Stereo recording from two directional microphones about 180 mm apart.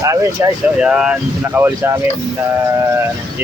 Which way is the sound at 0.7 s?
5° right (ahead or behind).